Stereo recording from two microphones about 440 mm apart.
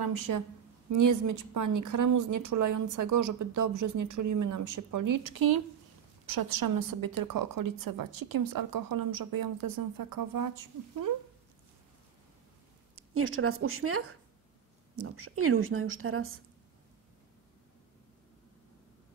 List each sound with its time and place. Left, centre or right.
0.0 s a woman's voice: right
12.9 s a woman's voice: right